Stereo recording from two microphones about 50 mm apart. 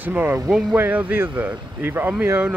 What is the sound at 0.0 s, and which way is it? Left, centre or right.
Speech, right.